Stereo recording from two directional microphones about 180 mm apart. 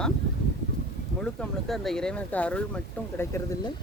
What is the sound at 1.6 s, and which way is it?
Speech, centre (ahead or behind).